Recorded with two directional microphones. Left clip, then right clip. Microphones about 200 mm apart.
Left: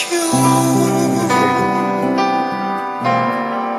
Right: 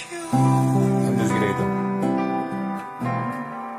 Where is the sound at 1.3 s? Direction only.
45° left (ahead or behind).